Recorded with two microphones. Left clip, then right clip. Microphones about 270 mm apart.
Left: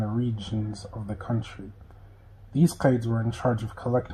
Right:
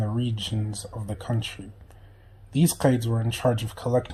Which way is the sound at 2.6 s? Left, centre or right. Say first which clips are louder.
Right 1 dB; right.